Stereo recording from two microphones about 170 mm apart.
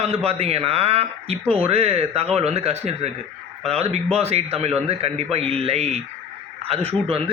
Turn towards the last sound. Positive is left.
turn(degrees=-35)  # may be behind; listen again after turning